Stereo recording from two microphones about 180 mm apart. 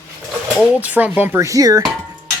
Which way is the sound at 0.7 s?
10° right (ahead or behind).